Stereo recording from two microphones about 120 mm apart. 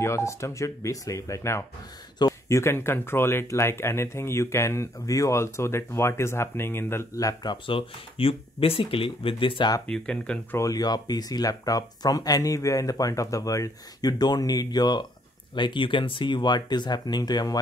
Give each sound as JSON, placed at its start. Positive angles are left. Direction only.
{"t": 0.0, "sound": "speech", "side_deg": 25}
{"t": 7.6, "sound": "speech", "side_deg": 50}
{"t": 9.8, "sound": "speech", "side_deg": 10}
{"t": 10.6, "sound": "speech", "side_deg": 30}